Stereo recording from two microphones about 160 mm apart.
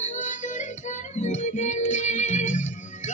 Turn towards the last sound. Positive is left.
turn(degrees=50)  # may be behind; listen again after turning